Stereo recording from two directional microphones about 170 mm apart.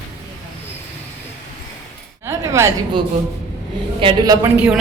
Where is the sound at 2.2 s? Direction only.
15° right (ahead or behind).